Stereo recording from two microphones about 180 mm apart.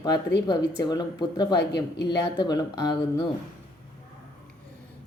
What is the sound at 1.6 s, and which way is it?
Speech, 70° left (ahead or behind).